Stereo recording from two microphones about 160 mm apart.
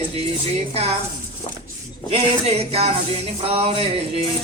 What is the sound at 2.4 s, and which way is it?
Speech, 40° right (ahead or behind).